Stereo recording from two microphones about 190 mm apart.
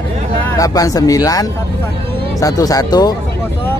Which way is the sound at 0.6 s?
20° left (ahead or behind).